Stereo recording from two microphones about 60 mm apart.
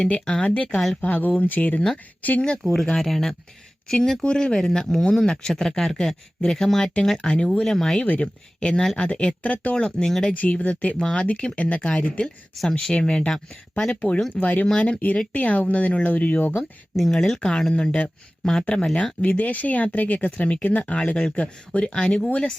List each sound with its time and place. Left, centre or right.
0.1 s speech: centre
1.0 s speech: left
2.7 s speech: centre
8.0 s speech: left
8.6 s speech: centre
9.8 s speech: centre
10.3 s speech: left
14.3 s speech: left
17.0 s speech: centre
19.2 s speech: left